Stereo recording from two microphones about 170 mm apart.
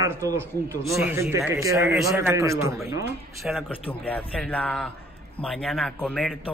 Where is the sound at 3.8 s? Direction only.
10° left (ahead or behind).